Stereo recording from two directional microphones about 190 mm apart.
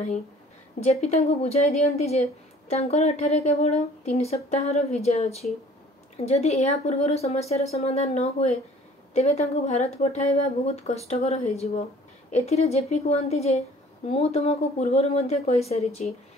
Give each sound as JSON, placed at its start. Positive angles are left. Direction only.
{"t": 0.7, "sound": "speech", "side_deg": 35}